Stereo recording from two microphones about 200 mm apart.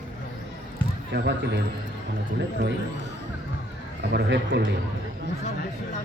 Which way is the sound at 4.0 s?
60° right (ahead or behind).